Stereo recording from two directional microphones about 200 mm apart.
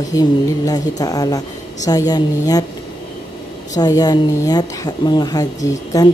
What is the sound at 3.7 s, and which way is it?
A woman's voice, 20° left (ahead or behind).